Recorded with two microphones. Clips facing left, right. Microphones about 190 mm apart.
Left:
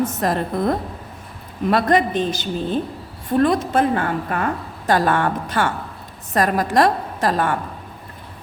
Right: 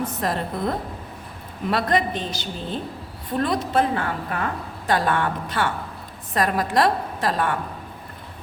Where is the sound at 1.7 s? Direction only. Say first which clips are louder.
Left 5 dB; 45° left (ahead or behind).